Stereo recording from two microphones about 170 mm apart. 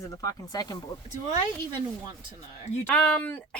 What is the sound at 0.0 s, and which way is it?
Speech, 20° left (ahead or behind).